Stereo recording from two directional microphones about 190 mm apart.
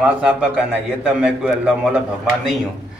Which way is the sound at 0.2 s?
5° right (ahead or behind).